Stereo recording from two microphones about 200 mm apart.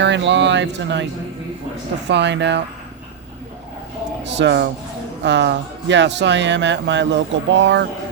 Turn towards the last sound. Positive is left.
turn(degrees=-65)  # may be behind; listen again after turning